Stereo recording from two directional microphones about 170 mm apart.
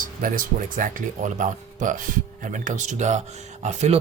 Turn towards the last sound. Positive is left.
turn(degrees=-40)  # may be behind; listen again after turning